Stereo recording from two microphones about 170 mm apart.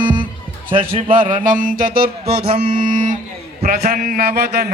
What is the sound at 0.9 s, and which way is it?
Mantra, 35° right (ahead or behind).